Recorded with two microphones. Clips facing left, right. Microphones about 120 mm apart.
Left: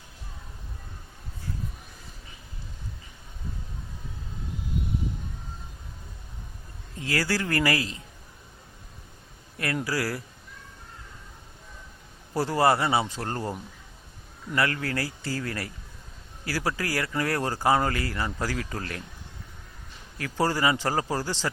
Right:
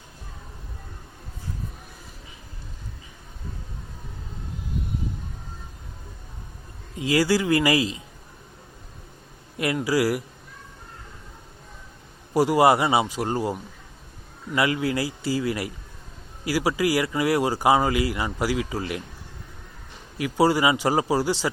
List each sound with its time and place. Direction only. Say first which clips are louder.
6.9 s speech: right 7 dB; 15° right (ahead or behind)
9.8 s speech: right 7 dB; 15° right (ahead or behind)
12.3 s speech: right 5 dB; 15° right (ahead or behind)
20.1 s speech: right 6 dB; 15° right (ahead or behind)